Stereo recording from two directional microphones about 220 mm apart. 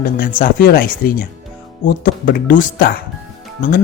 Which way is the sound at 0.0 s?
40° left (ahead or behind).